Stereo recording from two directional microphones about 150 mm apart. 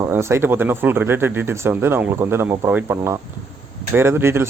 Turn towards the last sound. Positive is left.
turn(degrees=-15)  # may be behind; listen again after turning